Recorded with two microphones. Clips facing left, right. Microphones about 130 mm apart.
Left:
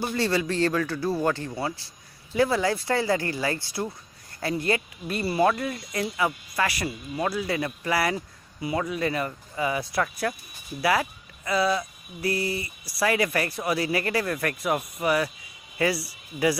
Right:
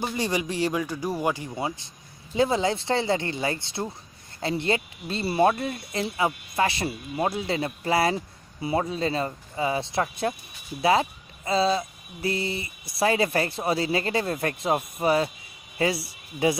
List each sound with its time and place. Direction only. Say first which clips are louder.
0.0 s speech: left 2 dB; 15° right (ahead or behind)